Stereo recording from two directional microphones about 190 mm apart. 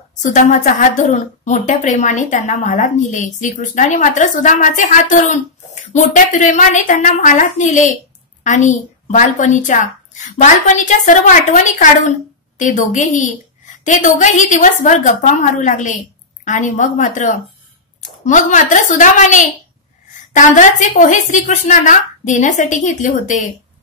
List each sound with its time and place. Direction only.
0.2 s a woman's voice: 40° left (ahead or behind)